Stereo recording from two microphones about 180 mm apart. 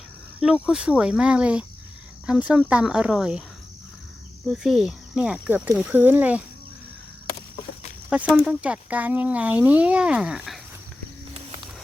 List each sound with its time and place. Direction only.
0.6 s speech: 5° right (ahead or behind)
4.4 s speech: centre (ahead or behind)
8.4 s speech: 5° right (ahead or behind)